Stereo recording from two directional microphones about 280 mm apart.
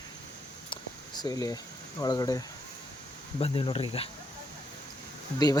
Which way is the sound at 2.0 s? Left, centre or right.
Centre.